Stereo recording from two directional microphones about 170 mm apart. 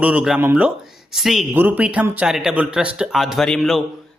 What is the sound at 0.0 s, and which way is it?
A man's voice, 5° right (ahead or behind).